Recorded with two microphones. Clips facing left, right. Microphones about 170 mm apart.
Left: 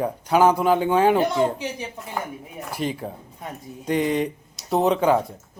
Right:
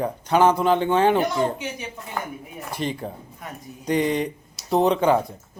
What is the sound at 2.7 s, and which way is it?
Speech, 5° left (ahead or behind).